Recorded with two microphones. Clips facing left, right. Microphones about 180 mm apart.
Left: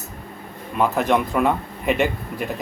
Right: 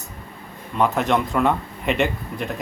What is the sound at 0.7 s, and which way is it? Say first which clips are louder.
Speech: left 1 dB; centre (ahead or behind).